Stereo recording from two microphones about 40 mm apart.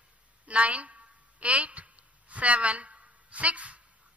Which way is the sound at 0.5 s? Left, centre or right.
Right.